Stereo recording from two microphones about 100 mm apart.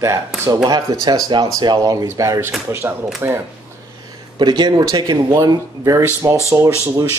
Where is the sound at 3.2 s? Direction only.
20° right (ahead or behind).